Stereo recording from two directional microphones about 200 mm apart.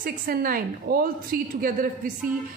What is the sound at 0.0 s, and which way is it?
A woman's voice, 45° right (ahead or behind).